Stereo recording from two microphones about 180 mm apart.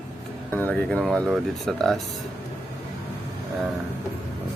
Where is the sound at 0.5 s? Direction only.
10° left (ahead or behind).